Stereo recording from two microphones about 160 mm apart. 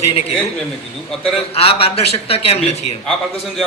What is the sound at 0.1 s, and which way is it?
A man's voice, 40° left (ahead or behind).